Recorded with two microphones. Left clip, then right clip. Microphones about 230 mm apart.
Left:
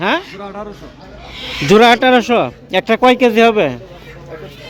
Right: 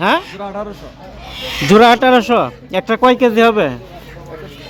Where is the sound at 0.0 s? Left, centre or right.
Centre.